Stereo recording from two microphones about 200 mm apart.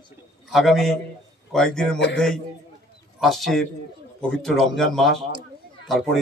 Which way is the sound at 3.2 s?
Centre (ahead or behind).